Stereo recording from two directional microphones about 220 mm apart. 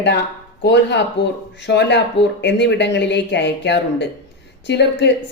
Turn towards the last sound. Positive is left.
turn(degrees=50)  # may be behind; listen again after turning